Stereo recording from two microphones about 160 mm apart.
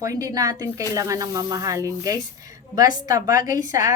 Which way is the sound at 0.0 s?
20° right (ahead or behind).